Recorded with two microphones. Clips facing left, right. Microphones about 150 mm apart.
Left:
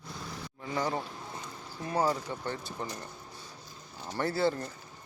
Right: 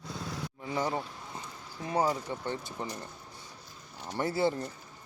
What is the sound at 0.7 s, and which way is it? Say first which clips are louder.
Speech: even; 15° right (ahead or behind).